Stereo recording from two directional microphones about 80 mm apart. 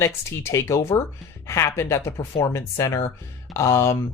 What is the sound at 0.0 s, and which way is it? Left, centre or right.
Speech, left.